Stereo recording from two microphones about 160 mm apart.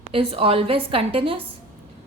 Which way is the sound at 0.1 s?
35° right (ahead or behind).